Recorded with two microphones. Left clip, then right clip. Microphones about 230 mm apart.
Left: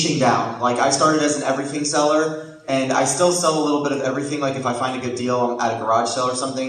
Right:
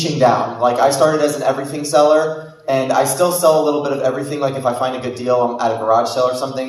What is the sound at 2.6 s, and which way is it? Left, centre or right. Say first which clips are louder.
A man's voice: right 4 dB; right.